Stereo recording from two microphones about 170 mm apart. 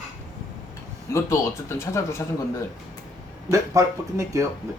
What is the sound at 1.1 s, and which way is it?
A man's voice, 15° left (ahead or behind).